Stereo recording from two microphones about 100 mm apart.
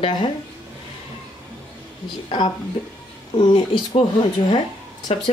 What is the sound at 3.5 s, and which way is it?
Speech, 60° left (ahead or behind).